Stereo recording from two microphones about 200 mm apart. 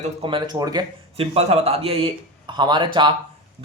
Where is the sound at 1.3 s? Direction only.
30° right (ahead or behind).